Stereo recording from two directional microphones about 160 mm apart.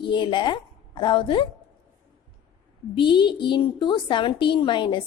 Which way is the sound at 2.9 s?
30° left (ahead or behind).